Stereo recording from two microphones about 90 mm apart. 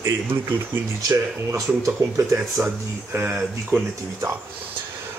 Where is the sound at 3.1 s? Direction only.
20° right (ahead or behind).